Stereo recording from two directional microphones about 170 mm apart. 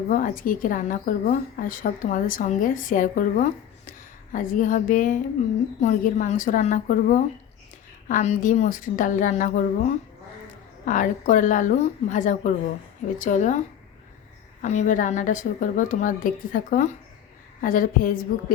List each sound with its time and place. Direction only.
0.1 s a woman's voice: 55° left (ahead or behind)
14.6 s a woman's voice: 45° left (ahead or behind)